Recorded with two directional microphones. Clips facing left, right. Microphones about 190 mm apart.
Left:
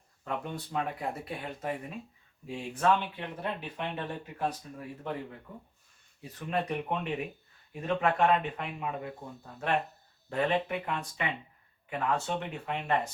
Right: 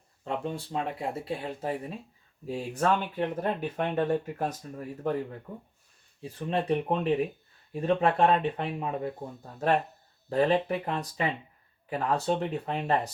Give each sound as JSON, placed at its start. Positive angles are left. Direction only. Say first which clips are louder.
{"t": 0.3, "sound": "speech", "louder": "right 3 dB", "side_deg": -30}
{"t": 6.2, "sound": "speech", "louder": "right 4 dB", "side_deg": -30}
{"t": 10.2, "sound": "speech", "louder": "right 5 dB", "side_deg": -35}